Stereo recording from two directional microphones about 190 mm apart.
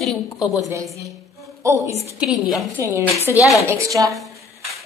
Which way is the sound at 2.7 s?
10° right (ahead or behind).